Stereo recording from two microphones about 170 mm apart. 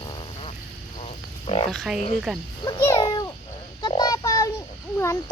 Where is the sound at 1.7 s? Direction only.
Centre (ahead or behind).